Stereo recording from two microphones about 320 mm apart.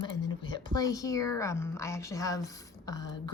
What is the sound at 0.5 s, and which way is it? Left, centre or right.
A woman's voice, centre.